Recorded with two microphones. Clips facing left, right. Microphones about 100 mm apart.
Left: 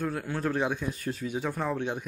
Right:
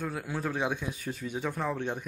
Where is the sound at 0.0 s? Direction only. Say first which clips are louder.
Left 3 dB; 5° right (ahead or behind).